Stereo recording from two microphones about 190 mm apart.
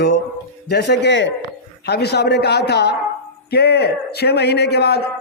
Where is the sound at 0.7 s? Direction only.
65° left (ahead or behind).